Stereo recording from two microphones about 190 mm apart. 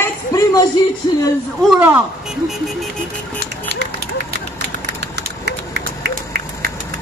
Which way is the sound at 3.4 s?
60° right (ahead or behind).